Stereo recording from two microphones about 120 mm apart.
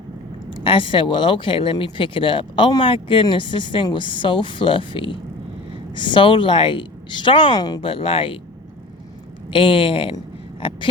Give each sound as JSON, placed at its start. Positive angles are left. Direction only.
{"t": 0.5, "sound": "speech", "side_deg": 50}
{"t": 7.8, "sound": "speech", "side_deg": 50}
{"t": 9.5, "sound": "speech", "side_deg": 50}
{"t": 10.6, "sound": "a sound", "side_deg": 50}